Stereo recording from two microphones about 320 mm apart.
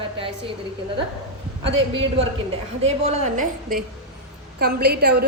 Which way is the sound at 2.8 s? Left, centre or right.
Centre.